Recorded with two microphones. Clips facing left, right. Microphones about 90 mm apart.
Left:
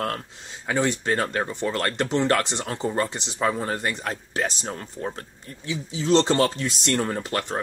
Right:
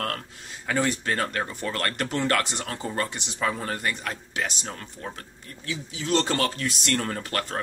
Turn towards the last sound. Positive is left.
turn(degrees=20)  # may be behind; listen again after turning